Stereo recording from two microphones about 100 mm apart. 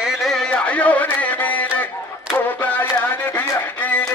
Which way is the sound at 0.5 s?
15° left (ahead or behind).